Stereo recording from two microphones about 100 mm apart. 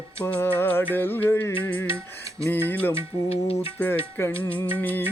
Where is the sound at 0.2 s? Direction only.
15° left (ahead or behind).